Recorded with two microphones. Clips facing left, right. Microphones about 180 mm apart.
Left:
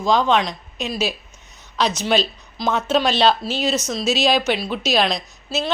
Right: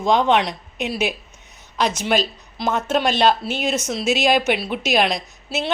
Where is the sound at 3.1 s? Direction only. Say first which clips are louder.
Even; 50° right (ahead or behind).